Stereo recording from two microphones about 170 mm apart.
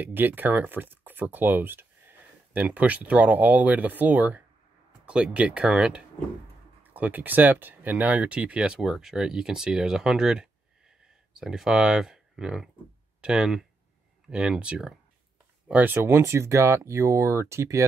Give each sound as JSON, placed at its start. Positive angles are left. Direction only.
{"t": 0.0, "sound": "speech", "side_deg": -10}